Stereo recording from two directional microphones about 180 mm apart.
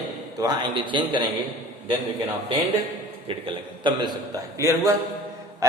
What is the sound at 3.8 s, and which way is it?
A man's voice, 20° right (ahead or behind).